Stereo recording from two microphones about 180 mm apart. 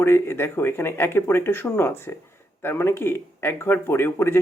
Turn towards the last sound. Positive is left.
turn(degrees=15)  # may be behind; listen again after turning